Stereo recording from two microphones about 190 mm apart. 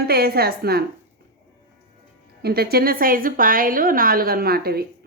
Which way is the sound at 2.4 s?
55° right (ahead or behind).